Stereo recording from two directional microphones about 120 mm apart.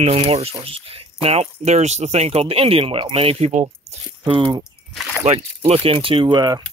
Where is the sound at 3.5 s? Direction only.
90° right.